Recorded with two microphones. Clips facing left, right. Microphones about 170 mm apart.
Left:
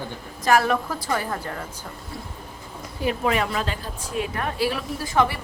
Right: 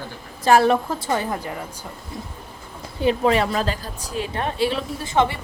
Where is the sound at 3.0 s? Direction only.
30° right (ahead or behind).